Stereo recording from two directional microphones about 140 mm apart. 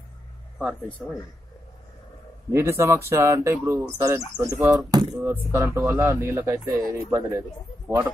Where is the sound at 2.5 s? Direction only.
20° right (ahead or behind).